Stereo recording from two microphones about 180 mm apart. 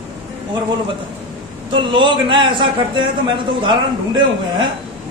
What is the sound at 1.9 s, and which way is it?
A man's voice, 25° right (ahead or behind).